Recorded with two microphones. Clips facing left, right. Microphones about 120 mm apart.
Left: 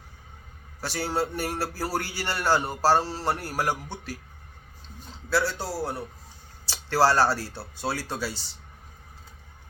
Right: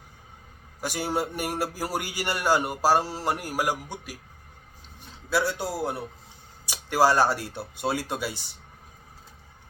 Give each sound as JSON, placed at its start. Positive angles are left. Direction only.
{"t": 0.8, "sound": "a man's voice", "side_deg": -15}
{"t": 5.3, "sound": "a man's voice", "side_deg": -15}